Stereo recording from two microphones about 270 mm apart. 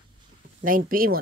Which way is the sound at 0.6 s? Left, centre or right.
Right.